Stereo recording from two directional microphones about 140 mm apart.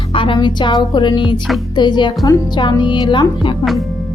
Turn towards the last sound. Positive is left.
turn(degrees=30)  # may be behind; listen again after turning